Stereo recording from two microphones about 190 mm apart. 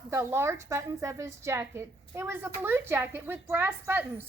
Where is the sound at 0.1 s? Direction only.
15° right (ahead or behind).